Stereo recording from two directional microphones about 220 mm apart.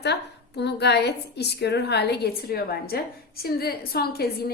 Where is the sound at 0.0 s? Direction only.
50° left (ahead or behind).